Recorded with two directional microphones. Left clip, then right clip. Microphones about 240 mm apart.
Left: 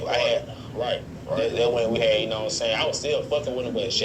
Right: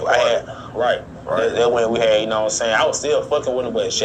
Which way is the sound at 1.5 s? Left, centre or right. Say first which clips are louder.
Right 6 dB; right.